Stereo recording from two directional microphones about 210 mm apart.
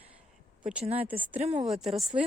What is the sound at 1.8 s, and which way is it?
Speech, centre (ahead or behind).